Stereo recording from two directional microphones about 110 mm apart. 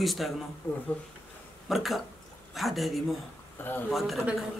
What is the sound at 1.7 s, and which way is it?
Speech, centre (ahead or behind).